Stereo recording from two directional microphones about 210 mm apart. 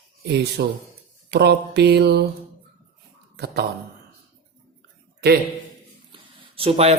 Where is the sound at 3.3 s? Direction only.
50° right (ahead or behind).